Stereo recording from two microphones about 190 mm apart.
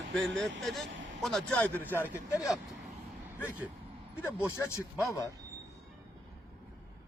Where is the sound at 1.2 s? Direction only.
5° left (ahead or behind).